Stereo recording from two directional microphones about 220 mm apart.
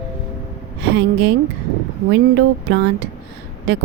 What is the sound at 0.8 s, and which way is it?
Speech, 50° right (ahead or behind).